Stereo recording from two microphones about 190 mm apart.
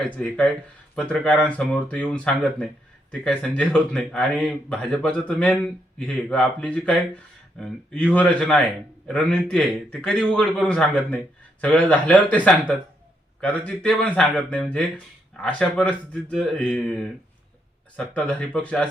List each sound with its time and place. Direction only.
0.2 s speech: 5° left (ahead or behind)